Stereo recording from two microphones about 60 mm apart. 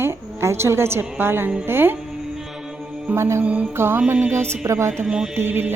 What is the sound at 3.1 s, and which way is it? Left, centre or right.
Speech, right.